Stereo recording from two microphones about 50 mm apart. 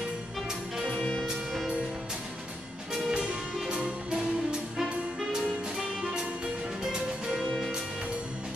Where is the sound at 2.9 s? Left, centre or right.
Centre.